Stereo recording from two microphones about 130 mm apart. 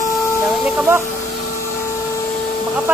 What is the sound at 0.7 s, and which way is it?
Speech, 15° right (ahead or behind).